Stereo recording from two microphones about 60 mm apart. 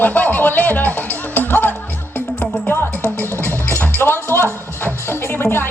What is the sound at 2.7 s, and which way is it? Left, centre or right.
Music, left.